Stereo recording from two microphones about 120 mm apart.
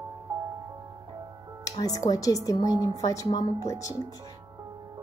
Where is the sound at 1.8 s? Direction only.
30° left (ahead or behind).